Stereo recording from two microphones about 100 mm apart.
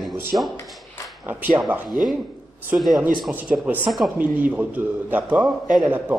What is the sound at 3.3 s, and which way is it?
Speech, 15° right (ahead or behind).